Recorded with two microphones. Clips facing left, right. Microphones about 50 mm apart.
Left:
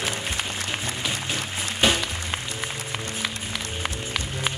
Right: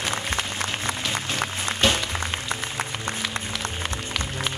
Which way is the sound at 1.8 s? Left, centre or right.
Centre.